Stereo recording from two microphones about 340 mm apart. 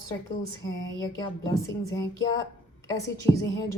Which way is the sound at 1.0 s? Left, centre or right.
Centre.